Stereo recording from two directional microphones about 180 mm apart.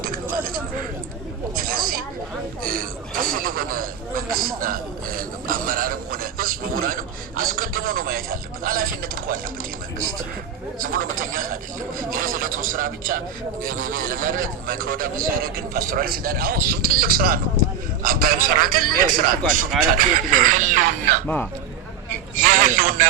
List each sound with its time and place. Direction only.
1.5 s a sound: 50° right (ahead or behind)
10.8 s a man's voice: 50° right (ahead or behind)
22.4 s a man's voice: 50° right (ahead or behind)